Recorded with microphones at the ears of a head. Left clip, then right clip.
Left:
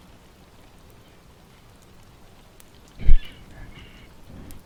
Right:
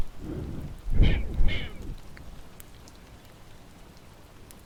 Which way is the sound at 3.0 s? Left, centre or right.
Left.